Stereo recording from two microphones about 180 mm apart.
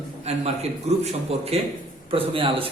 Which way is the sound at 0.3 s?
35° right (ahead or behind).